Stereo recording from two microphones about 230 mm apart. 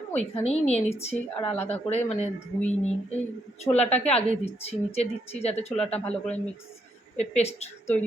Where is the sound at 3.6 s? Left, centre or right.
Left.